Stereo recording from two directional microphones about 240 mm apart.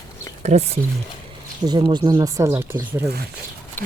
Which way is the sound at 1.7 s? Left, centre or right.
Centre.